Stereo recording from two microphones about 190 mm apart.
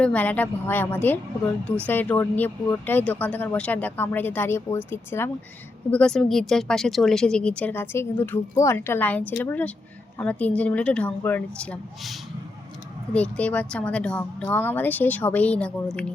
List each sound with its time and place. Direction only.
0.0 s a woman's voice: 10° left (ahead or behind)
13.1 s speech: 5° left (ahead or behind)